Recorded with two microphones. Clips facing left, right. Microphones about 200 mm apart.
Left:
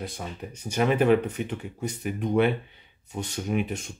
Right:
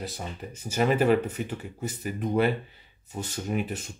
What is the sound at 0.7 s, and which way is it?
Speech, 5° right (ahead or behind).